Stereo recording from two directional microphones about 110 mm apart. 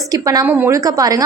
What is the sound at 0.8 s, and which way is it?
Speech, 30° right (ahead or behind).